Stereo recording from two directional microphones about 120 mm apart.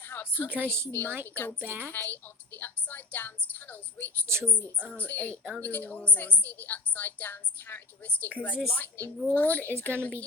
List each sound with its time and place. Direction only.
0.1 s a woman's voice: 15° left (ahead or behind)
0.5 s a woman's voice: 20° right (ahead or behind)
0.9 s a woman's voice: 15° left (ahead or behind)
1.6 s a woman's voice: 15° right (ahead or behind)
1.9 s a woman's voice: 15° left (ahead or behind)